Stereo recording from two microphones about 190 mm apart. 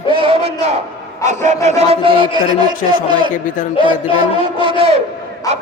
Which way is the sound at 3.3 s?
45° left (ahead or behind).